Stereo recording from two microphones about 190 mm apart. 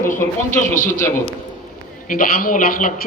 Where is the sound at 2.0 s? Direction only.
45° left (ahead or behind).